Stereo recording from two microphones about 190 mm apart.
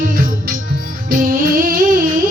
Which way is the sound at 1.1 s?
50° right (ahead or behind).